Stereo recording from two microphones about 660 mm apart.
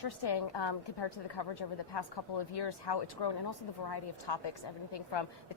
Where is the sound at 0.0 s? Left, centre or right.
Left.